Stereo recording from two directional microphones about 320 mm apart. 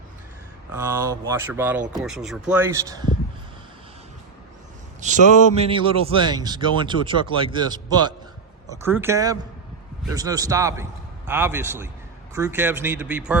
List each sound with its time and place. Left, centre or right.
0.7 s speech: centre
5.0 s speech: right; by 13.3 s centre